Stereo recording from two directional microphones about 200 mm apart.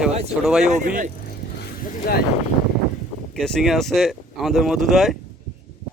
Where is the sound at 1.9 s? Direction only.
45° left (ahead or behind).